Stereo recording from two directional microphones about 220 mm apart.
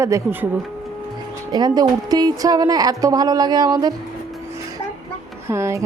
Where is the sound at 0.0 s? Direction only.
10° right (ahead or behind).